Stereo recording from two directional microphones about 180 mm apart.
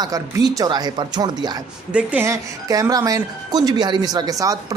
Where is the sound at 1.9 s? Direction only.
10° right (ahead or behind).